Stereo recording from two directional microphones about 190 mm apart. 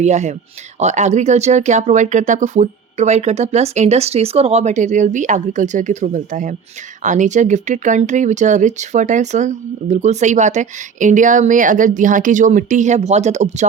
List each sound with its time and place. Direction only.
0.0 s speech: 35° right (ahead or behind)